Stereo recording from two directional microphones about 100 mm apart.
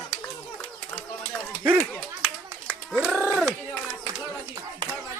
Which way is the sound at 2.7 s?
10° right (ahead or behind).